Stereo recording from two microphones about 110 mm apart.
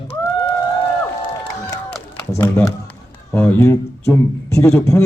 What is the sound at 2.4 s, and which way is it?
A man's voice, 30° left (ahead or behind).